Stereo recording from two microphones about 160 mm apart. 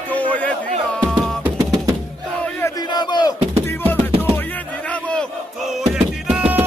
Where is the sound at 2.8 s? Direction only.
25° left (ahead or behind).